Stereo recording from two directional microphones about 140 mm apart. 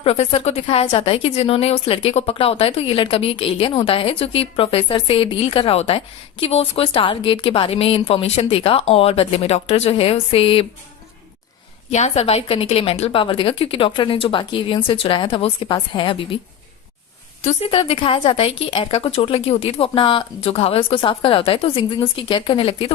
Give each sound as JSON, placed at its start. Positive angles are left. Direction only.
{"t": 0.0, "sound": "a woman's voice", "side_deg": 45}
{"t": 11.9, "sound": "a woman's voice", "side_deg": 55}
{"t": 17.4, "sound": "a woman's voice", "side_deg": 45}